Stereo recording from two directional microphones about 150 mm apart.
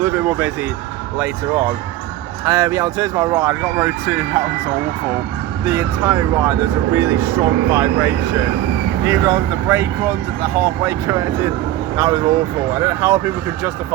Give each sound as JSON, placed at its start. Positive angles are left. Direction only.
{"t": 0.0, "sound": "speech", "side_deg": -15}
{"t": 2.4, "sound": "speech", "side_deg": -20}
{"t": 5.6, "sound": "speech", "side_deg": -20}